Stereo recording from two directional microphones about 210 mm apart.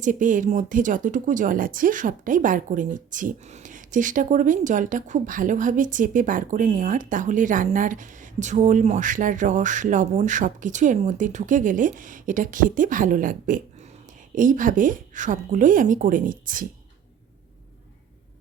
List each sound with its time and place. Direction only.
0.0 s speech: 40° right (ahead or behind)